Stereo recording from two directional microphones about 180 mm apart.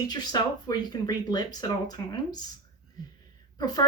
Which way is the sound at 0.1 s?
20° left (ahead or behind).